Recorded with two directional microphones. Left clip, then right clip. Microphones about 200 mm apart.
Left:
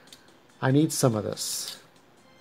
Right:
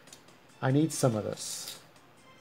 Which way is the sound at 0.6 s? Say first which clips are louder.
Left 4 dB; 20° left (ahead or behind).